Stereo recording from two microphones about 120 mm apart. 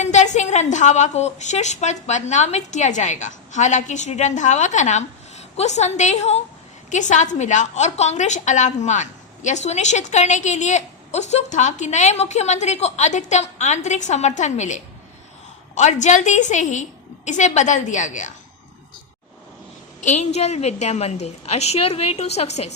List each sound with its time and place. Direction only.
0.0 s a woman's voice: 75° left (ahead or behind)
6.9 s a woman's voice: 90° left
20.1 s a woman's voice: 70° left (ahead or behind)